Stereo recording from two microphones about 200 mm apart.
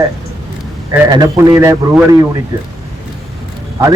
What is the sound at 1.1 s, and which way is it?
A man's voice, 15° right (ahead or behind).